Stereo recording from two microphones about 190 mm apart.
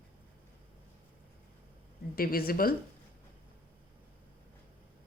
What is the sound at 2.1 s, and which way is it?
Speech, 50° left (ahead or behind).